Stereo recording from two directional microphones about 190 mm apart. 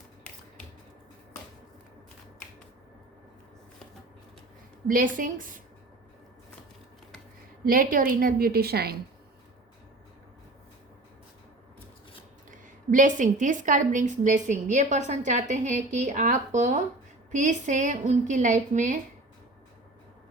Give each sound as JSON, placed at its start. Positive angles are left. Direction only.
{"t": 4.9, "sound": "a woman's voice", "side_deg": -45}
{"t": 7.6, "sound": "a woman's voice", "side_deg": -50}
{"t": 12.5, "sound": "a woman's voice", "side_deg": -45}